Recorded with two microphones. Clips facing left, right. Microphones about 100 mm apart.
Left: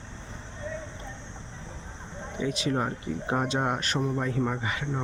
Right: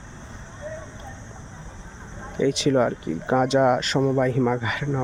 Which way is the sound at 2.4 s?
80° right.